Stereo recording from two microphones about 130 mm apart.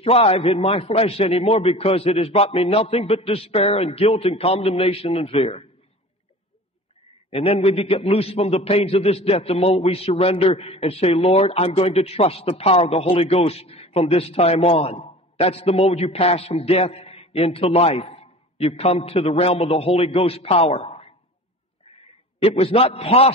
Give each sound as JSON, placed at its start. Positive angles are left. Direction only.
{"t": 0.0, "sound": "a man's voice", "side_deg": 50}
{"t": 7.2, "sound": "a man's voice", "side_deg": 50}
{"t": 22.4, "sound": "a man's voice", "side_deg": 50}